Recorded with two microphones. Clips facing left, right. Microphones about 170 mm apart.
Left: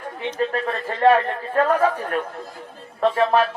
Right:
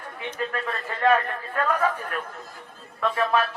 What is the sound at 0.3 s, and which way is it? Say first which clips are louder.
A man's voice: left 6 dB; 35° left (ahead or behind).